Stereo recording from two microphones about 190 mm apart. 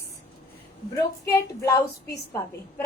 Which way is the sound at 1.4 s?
15° left (ahead or behind).